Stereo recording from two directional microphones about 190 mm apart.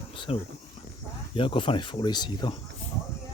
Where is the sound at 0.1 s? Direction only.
25° left (ahead or behind).